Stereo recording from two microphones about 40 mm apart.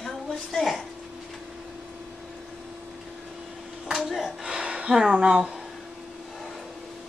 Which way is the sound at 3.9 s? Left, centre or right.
Centre.